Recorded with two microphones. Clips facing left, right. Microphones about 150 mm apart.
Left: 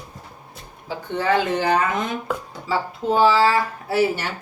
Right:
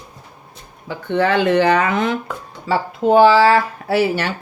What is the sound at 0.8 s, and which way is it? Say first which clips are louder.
Speech: right 4 dB; 65° right (ahead or behind).